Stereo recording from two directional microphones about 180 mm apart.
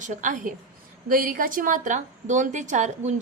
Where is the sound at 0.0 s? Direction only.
45° right (ahead or behind).